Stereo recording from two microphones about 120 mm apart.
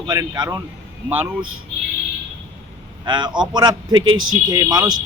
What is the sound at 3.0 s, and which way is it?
A man's voice, 40° right (ahead or behind).